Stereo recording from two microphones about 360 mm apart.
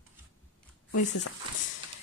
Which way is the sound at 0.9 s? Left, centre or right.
Left.